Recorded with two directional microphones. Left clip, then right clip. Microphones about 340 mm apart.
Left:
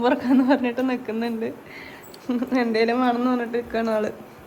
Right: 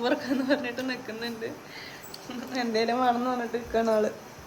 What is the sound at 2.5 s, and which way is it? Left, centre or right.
Speech, centre.